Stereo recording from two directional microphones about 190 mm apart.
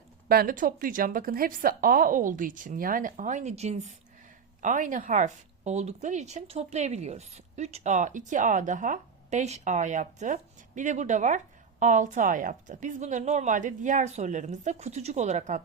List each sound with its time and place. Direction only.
0.3 s a woman's voice: 50° right (ahead or behind)